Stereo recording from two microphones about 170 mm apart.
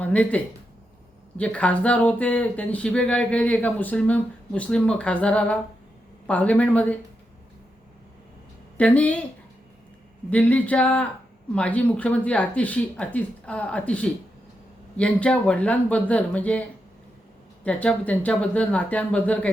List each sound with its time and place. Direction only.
0.0 s speech: 10° left (ahead or behind)
8.8 s speech: 10° left (ahead or behind)
10.2 s speech: 10° left (ahead or behind)